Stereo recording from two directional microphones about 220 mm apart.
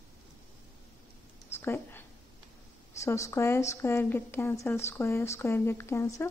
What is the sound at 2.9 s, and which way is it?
A woman's voice, 15° left (ahead or behind).